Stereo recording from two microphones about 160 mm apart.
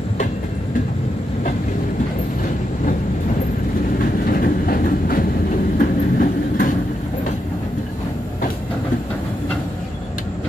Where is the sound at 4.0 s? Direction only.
65° left (ahead or behind).